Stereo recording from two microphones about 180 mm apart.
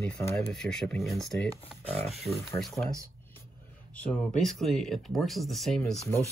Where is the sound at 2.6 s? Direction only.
Centre (ahead or behind).